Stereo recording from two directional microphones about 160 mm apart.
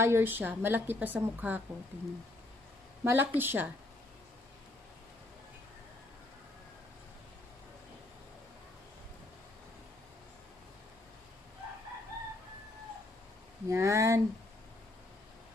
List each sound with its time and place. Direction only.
0.0 s a woman's voice: 15° right (ahead or behind)
3.0 s a woman's voice: 10° right (ahead or behind)
13.7 s speech: 20° right (ahead or behind)